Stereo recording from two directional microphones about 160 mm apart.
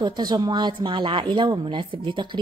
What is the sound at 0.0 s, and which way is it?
Speech, 25° right (ahead or behind).